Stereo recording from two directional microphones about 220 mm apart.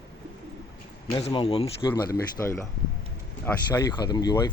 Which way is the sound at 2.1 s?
15° left (ahead or behind).